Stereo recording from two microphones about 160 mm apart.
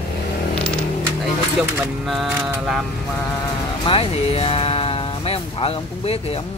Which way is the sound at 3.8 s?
35° left (ahead or behind).